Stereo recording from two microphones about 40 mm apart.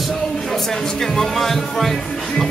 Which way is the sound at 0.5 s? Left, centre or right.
Centre.